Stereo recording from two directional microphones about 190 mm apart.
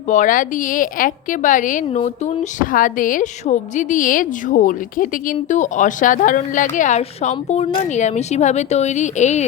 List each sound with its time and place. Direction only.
0.1 s a woman's voice: 45° left (ahead or behind)